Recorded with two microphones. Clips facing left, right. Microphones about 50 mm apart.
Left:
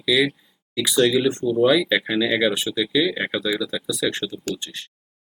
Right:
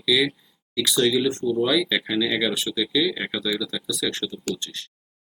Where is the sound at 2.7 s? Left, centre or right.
Centre.